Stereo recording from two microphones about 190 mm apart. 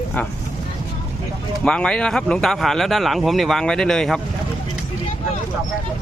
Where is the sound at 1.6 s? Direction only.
5° left (ahead or behind).